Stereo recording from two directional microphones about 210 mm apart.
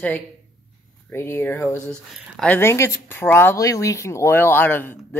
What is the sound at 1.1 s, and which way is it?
Speech, 10° left (ahead or behind).